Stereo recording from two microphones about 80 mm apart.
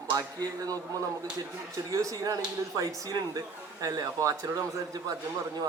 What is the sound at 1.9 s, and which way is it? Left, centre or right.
Speech, right.